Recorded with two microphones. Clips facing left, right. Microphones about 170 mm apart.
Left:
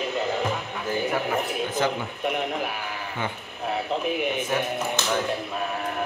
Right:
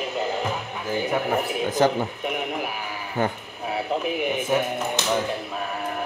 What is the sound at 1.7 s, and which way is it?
Speech, 40° right (ahead or behind).